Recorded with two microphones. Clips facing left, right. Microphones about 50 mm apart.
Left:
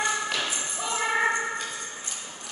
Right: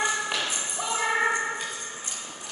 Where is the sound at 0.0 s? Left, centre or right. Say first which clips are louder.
Even; centre.